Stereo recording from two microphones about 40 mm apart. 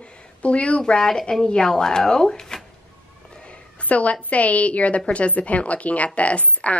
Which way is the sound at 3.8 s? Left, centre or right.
Left.